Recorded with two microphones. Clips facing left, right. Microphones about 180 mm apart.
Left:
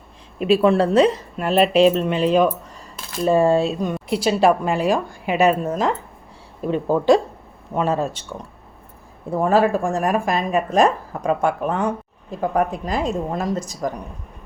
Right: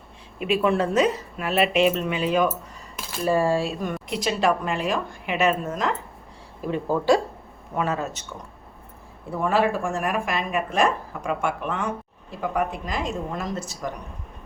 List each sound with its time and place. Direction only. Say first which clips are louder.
0.3 s speech: left 6 dB; 35° left (ahead or behind)
4.2 s speech: left 6 dB; 35° left (ahead or behind)
6.7 s speech: left 4 dB; 20° left (ahead or behind)
9.3 s speech: left 5 dB; 40° left (ahead or behind)